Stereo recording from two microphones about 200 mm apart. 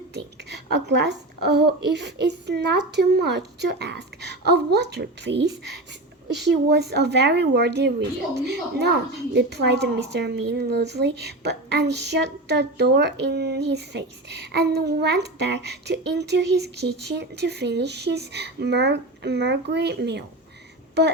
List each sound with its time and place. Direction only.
0.9 s a woman's voice: 60° right (ahead or behind)